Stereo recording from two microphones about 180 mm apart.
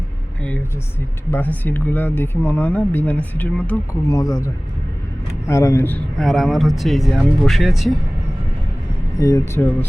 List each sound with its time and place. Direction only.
1.3 s speech: 10° left (ahead or behind)
5.5 s speech: 15° left (ahead or behind)
6.1 s speech: centre (ahead or behind)
9.1 s speech: 20° left (ahead or behind)